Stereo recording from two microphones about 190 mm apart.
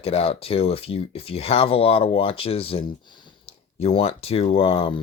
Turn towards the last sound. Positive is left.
turn(degrees=30)  # may be behind; listen again after turning